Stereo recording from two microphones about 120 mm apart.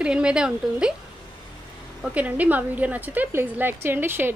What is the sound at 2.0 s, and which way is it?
A woman's voice, 10° right (ahead or behind).